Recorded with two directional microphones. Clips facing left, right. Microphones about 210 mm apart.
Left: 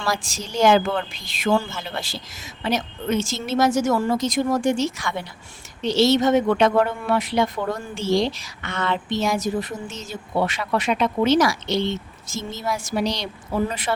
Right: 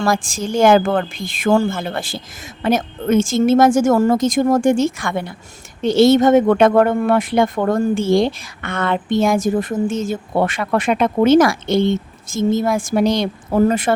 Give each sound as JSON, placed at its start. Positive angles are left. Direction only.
{"t": 0.0, "sound": "a woman's voice", "side_deg": -50}